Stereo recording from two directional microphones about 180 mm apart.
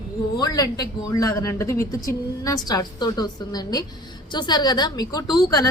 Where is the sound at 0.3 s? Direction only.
20° left (ahead or behind).